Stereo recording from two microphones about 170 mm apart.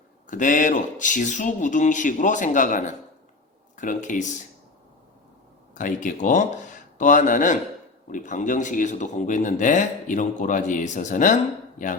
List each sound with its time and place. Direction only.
0.3 s speech: 50° left (ahead or behind)
5.7 s speech: 50° left (ahead or behind)